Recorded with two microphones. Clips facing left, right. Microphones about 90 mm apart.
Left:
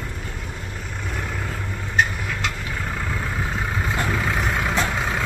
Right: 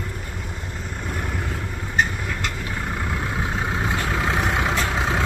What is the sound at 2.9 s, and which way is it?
Vehicle, 15° right (ahead or behind).